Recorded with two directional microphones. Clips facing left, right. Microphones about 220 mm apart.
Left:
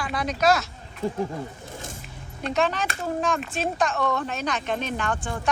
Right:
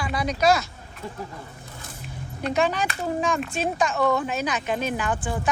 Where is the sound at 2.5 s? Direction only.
Centre (ahead or behind).